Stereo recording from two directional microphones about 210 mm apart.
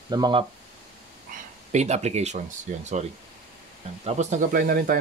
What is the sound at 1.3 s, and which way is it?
Speech, 35° right (ahead or behind).